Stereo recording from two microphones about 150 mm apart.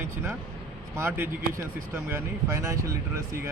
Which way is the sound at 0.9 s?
15° right (ahead or behind).